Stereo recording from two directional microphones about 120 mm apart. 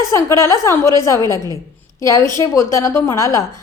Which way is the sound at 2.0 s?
30° left (ahead or behind).